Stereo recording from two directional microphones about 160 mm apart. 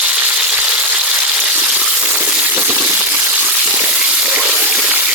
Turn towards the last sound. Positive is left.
turn(degrees=-5)  # may be behind; listen again after turning